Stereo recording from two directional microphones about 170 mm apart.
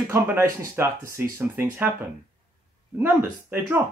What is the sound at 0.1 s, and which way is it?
Speech, 10° right (ahead or behind).